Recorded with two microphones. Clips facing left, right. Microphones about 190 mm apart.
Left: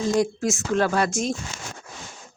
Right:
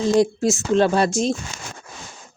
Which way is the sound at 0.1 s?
30° right (ahead or behind).